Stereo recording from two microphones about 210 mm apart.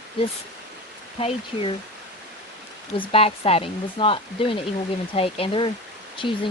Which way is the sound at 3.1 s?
25° left (ahead or behind).